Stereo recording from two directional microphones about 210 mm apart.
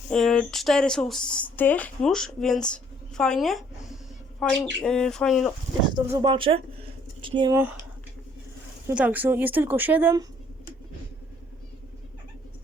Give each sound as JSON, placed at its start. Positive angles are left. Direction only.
{"t": 0.1, "sound": "speech", "side_deg": 0}
{"t": 5.8, "sound": "speech", "side_deg": -20}
{"t": 8.9, "sound": "speech", "side_deg": -10}